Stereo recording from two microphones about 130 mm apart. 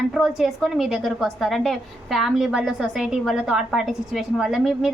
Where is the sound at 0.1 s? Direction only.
5° right (ahead or behind).